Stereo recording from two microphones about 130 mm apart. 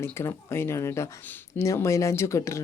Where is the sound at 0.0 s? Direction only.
20° left (ahead or behind).